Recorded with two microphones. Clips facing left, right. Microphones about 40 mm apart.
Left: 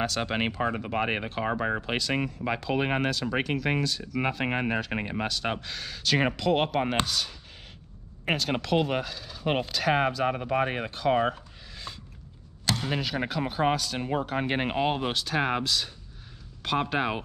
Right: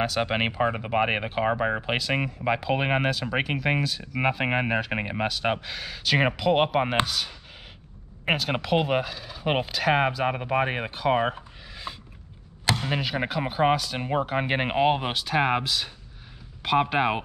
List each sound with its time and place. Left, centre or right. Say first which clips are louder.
0.0 s speech: right 3 dB; centre